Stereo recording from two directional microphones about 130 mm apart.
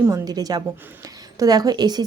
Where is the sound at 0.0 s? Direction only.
25° right (ahead or behind).